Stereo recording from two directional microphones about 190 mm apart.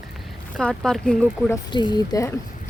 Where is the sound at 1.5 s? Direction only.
20° left (ahead or behind).